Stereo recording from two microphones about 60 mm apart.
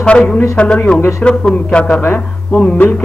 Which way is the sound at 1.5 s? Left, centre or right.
Centre.